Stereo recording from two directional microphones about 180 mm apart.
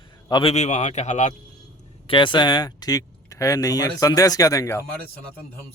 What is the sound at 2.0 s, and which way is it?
Speech, 25° left (ahead or behind).